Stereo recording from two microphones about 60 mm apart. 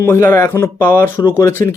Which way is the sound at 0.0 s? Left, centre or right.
Left.